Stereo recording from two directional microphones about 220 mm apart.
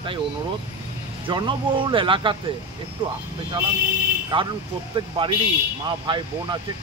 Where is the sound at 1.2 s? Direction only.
20° right (ahead or behind).